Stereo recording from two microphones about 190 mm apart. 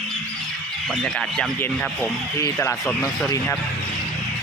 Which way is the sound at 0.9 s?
5° left (ahead or behind).